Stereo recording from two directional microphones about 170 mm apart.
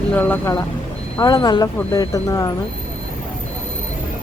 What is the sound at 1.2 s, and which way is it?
Speech, 25° left (ahead or behind).